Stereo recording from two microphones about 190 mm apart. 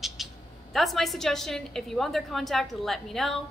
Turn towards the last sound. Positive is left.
turn(degrees=0)  # may be behind; listen again after turning